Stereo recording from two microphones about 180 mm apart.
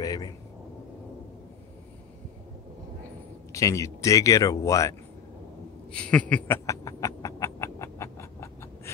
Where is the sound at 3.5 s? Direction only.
15° left (ahead or behind).